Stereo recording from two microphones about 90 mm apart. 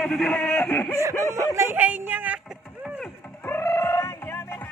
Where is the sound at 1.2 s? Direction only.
35° right (ahead or behind).